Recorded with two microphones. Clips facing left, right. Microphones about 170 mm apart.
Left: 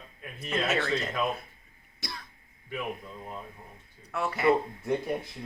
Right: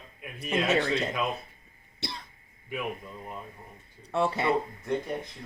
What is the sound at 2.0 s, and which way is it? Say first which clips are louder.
Throat clearing: right 3 dB; 30° right (ahead or behind).